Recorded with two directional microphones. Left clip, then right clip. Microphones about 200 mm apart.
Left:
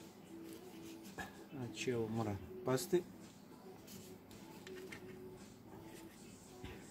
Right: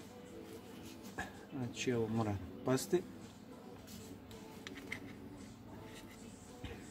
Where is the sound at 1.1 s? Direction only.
Centre (ahead or behind).